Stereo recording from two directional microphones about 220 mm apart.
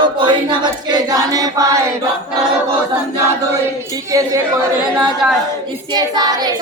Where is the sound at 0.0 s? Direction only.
20° right (ahead or behind).